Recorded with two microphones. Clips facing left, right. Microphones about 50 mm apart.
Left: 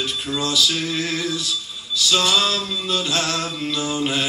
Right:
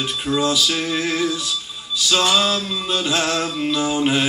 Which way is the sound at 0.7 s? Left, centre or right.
Centre.